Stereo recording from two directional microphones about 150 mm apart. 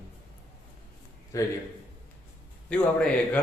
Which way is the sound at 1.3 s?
20° left (ahead or behind).